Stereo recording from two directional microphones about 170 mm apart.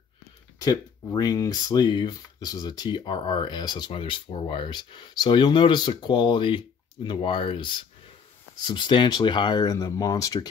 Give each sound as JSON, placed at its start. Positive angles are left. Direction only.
{"t": 0.6, "sound": "speech", "side_deg": 25}